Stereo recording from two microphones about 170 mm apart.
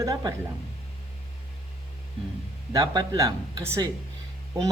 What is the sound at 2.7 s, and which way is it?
Speech, 25° right (ahead or behind).